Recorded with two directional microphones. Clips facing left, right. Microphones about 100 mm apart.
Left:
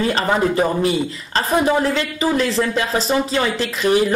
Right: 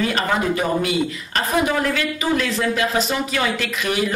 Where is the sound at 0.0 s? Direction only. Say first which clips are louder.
Left 3 dB; 30° left (ahead or behind).